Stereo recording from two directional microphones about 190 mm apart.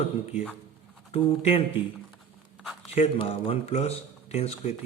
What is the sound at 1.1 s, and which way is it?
Speech, 30° left (ahead or behind).